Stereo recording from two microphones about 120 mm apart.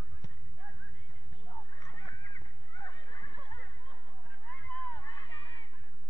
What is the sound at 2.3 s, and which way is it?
Neigh, 35° left (ahead or behind).